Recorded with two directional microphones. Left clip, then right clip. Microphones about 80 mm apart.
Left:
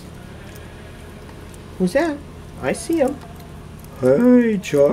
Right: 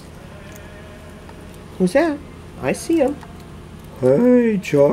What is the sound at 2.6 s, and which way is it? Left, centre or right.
Speech, centre.